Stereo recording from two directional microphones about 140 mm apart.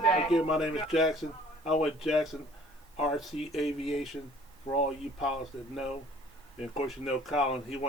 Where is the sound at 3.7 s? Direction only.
45° left (ahead or behind).